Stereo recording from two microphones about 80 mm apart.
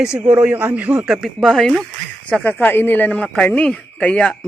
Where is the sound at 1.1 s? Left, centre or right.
Centre.